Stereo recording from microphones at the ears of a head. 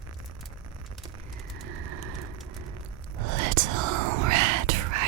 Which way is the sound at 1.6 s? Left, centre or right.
Right.